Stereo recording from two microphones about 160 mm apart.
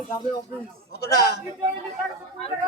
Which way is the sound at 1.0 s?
90° left.